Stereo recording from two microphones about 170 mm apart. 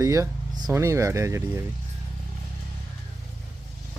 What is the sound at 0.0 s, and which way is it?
Speech, 20° right (ahead or behind).